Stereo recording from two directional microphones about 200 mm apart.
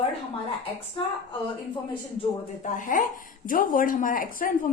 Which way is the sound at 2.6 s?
40° left (ahead or behind).